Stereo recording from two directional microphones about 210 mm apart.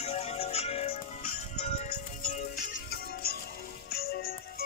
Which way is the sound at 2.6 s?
50° left (ahead or behind).